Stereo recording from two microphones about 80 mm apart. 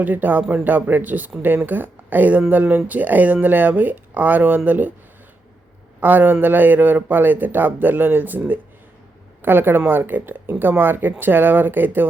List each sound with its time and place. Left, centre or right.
0.0 s speech: right
6.0 s speech: right